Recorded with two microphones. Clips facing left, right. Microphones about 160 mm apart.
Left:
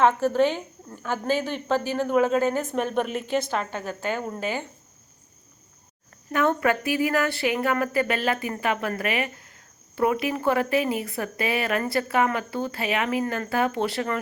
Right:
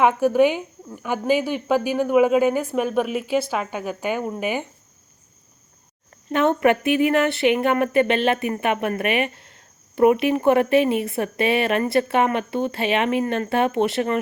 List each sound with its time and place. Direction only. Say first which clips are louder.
0.0 s a woman's voice: right 3 dB; 15° right (ahead or behind)
6.2 s a woman's voice: right 4 dB; 20° right (ahead or behind)